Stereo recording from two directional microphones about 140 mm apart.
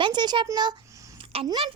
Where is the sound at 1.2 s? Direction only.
45° right (ahead or behind).